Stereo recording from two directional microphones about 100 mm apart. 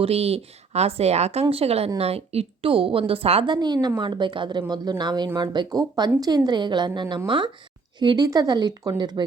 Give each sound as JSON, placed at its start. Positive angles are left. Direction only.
{"t": 0.0, "sound": "a woman's voice", "side_deg": -90}
{"t": 3.4, "sound": "a woman's voice", "side_deg": -50}